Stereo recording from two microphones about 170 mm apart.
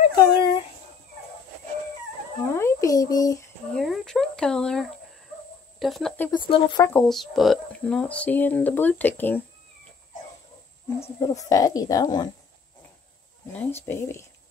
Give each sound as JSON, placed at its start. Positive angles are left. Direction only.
{"t": 0.1, "sound": "dog", "side_deg": 25}
{"t": 2.4, "sound": "a sound", "side_deg": 15}
{"t": 3.7, "sound": "cricket", "side_deg": 0}
{"t": 5.8, "sound": "speech", "side_deg": 0}
{"t": 6.3, "sound": "speech", "side_deg": 25}
{"t": 6.9, "sound": "speech", "side_deg": 5}
{"t": 11.0, "sound": "speech", "side_deg": 20}
{"t": 13.5, "sound": "speech", "side_deg": 10}